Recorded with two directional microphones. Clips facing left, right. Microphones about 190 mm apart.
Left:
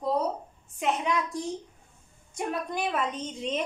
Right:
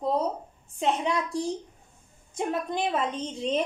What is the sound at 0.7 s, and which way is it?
A woman's voice, 30° right (ahead or behind).